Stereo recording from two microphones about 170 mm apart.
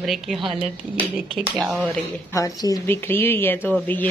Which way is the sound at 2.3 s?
20° left (ahead or behind).